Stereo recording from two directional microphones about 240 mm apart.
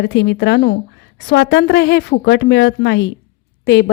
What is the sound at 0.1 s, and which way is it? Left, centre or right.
A woman's voice, left.